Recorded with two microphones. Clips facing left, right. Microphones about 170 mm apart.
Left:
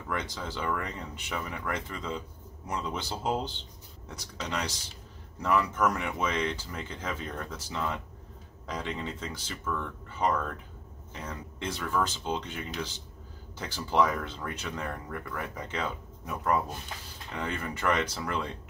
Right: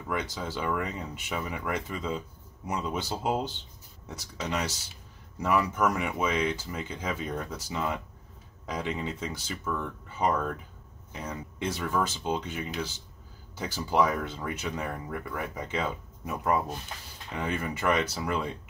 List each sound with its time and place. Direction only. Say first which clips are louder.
0.1 s speech: right 2 dB; 10° right (ahead or behind)